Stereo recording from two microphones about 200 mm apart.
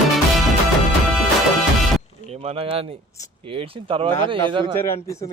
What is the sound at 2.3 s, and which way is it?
Speech, 30° right (ahead or behind).